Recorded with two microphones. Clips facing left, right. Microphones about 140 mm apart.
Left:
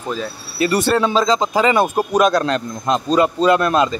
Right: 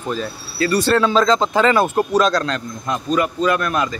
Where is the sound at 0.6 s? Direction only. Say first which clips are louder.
Even; 20° left (ahead or behind).